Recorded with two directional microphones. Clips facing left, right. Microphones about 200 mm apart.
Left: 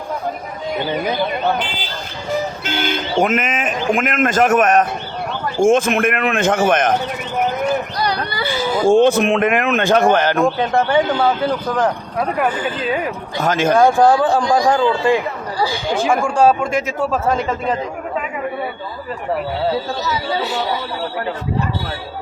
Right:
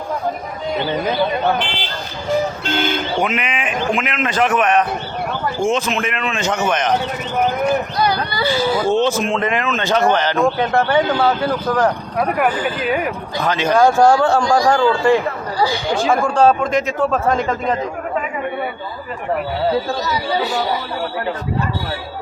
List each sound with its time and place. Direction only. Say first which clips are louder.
3.2 s a man's voice: left 3 dB; 45° left (ahead or behind)
8.8 s a man's voice: left 4 dB; 50° left (ahead or behind)
10.4 s speech: even; 15° left (ahead or behind)
13.4 s a man's voice: left 2 dB; 45° left (ahead or behind)
13.8 s speech: right 2 dB; 15° left (ahead or behind)
20.1 s speech: right 1 dB; centre (ahead or behind)